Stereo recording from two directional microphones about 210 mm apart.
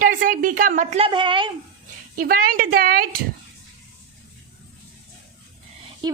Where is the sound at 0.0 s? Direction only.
40° right (ahead or behind); by 1.5 s 25° right (ahead or behind).